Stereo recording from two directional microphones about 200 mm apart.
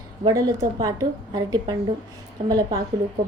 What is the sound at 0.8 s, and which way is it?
A woman's voice, 20° right (ahead or behind).